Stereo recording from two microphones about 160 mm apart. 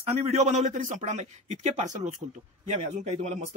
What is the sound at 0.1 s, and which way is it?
Speech, 40° right (ahead or behind).